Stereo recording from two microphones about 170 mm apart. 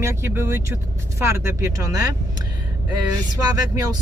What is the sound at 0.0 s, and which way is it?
Speech, 15° right (ahead or behind).